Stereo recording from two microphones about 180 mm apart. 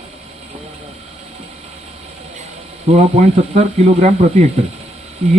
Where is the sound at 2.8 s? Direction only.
40° right (ahead or behind).